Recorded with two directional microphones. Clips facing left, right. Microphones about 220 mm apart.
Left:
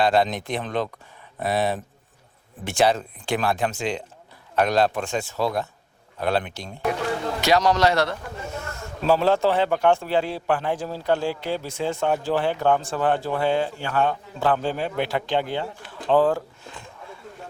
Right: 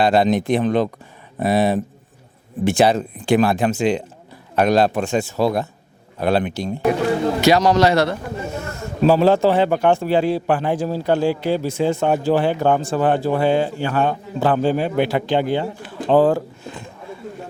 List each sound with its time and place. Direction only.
0.0 s speech: 10° right (ahead or behind)